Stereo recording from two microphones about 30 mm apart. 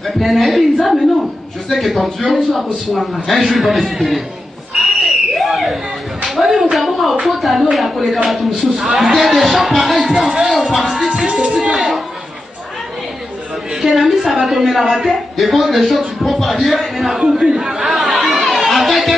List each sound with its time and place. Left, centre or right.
0.2 s a man's voice: centre
4.7 s a sound: centre
5.5 s a sound: centre
6.7 s a sound: centre
7.2 s a man's voice: centre
11.5 s chatter: centre
13.7 s a man's voice: centre
17.2 s speech: right
17.8 s chatter: centre